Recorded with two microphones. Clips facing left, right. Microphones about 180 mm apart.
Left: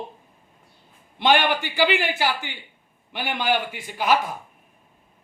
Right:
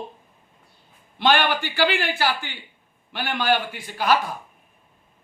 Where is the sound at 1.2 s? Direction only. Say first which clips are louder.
Even; 20° left (ahead or behind).